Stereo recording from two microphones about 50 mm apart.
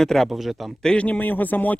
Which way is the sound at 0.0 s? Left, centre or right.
Centre.